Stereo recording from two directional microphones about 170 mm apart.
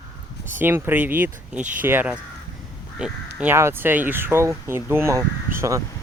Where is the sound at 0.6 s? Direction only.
10° right (ahead or behind).